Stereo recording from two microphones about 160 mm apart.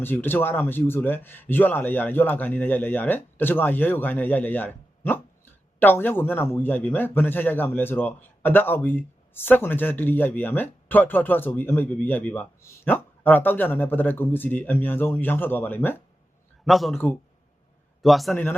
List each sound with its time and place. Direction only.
0.0 s a man's voice: 15° left (ahead or behind)
16.6 s a man's voice: centre (ahead or behind)
18.0 s a man's voice: centre (ahead or behind)